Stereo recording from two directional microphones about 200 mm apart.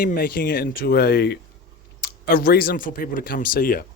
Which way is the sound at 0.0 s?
45° left (ahead or behind).